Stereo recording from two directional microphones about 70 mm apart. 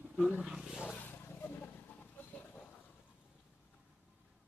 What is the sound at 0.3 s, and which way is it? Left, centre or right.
Speech, centre.